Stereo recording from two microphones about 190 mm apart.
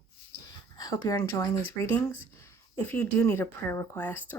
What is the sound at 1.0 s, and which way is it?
Speech, 20° left (ahead or behind).